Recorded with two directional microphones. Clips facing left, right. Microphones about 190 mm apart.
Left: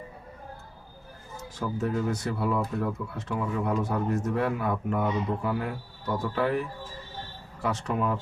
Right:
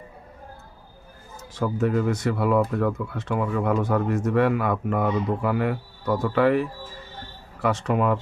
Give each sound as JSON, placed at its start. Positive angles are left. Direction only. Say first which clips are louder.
{"t": 1.5, "sound": "speech", "louder": "right 6 dB", "side_deg": -75}